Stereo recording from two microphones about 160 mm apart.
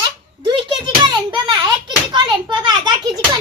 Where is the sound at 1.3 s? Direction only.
30° right (ahead or behind).